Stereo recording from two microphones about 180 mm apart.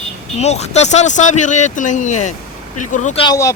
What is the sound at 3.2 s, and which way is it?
Speech, 15° left (ahead or behind).